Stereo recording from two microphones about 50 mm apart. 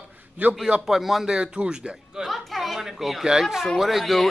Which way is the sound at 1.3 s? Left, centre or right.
Centre.